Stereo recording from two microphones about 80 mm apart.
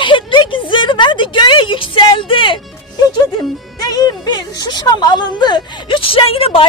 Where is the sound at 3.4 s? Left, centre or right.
Left.